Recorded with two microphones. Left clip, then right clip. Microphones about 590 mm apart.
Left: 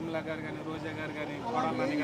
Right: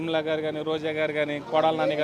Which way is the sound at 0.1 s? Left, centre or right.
Right.